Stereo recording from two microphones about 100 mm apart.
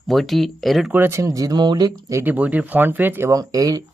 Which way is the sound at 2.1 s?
20° right (ahead or behind).